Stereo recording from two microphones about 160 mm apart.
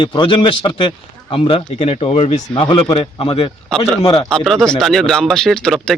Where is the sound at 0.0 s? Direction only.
30° left (ahead or behind).